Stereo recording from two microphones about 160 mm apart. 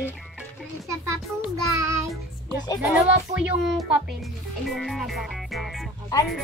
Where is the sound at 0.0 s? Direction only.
10° right (ahead or behind).